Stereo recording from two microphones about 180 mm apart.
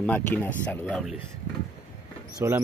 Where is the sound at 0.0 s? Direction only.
10° left (ahead or behind).